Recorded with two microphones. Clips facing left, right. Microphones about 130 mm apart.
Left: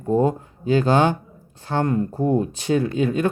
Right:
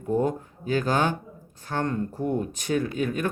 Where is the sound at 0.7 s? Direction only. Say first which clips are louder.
Left 6 dB; 25° left (ahead or behind).